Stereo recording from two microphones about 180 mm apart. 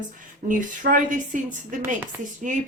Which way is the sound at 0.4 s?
45° right (ahead or behind).